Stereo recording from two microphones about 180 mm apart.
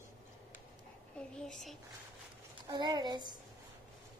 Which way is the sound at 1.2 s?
5° left (ahead or behind).